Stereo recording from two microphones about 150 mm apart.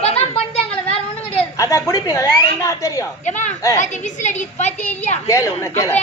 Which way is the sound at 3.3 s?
55° left (ahead or behind).